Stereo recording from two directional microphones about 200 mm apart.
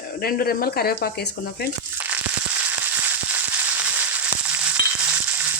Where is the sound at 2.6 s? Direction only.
10° right (ahead or behind).